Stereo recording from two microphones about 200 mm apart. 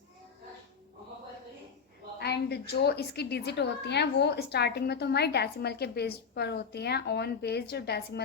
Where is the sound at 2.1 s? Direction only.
55° left (ahead or behind).